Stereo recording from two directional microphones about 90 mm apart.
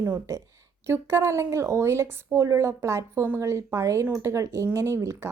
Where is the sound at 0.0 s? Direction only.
25° right (ahead or behind).